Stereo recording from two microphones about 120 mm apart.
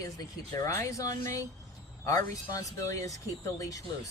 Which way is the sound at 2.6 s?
25° left (ahead or behind).